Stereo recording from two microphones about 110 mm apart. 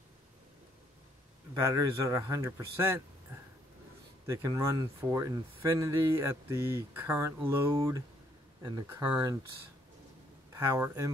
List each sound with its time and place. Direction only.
1.5 s speech: 30° right (ahead or behind)
4.3 s speech: 30° right (ahead or behind)
9.0 s speech: 35° right (ahead or behind)
10.5 s speech: 25° right (ahead or behind)